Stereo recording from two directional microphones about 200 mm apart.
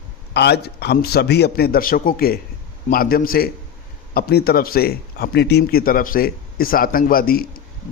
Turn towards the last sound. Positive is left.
turn(degrees=45)  # may be behind; listen again after turning